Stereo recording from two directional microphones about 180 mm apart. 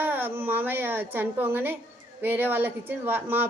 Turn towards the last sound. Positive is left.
turn(degrees=-10)  # may be behind; listen again after turning